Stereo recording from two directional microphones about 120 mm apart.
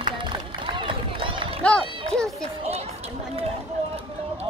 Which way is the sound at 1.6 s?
10° left (ahead or behind).